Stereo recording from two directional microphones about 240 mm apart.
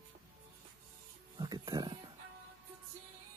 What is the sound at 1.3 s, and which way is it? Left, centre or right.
Music, centre.